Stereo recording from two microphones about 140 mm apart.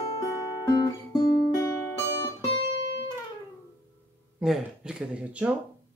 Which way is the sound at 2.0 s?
15° left (ahead or behind).